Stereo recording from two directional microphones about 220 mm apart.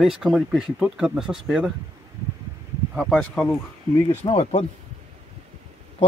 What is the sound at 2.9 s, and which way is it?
Speech, 5° left (ahead or behind).